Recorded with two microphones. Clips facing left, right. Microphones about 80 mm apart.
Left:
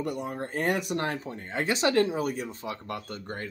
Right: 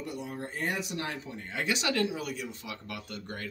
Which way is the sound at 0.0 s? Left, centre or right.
Left.